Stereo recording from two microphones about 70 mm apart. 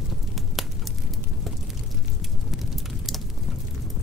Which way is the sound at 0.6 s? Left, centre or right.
Centre.